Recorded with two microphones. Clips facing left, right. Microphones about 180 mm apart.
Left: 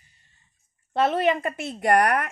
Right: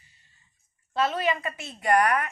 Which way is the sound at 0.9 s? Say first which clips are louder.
Left 4 dB; 60° left (ahead or behind).